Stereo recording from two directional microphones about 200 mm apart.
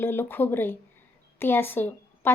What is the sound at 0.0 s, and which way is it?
A woman's voice, 10° left (ahead or behind).